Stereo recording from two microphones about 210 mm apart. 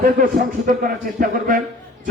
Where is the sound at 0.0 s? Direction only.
40° right (ahead or behind).